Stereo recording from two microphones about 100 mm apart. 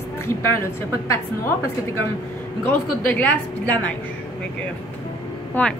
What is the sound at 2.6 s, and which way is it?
A woman's voice, 20° left (ahead or behind).